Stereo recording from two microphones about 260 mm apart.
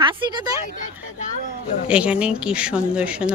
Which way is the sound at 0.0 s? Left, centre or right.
Centre.